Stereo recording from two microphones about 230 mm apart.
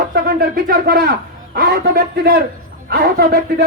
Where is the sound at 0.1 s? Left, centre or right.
Right.